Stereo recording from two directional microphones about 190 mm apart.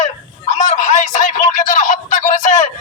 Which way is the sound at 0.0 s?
40° left (ahead or behind).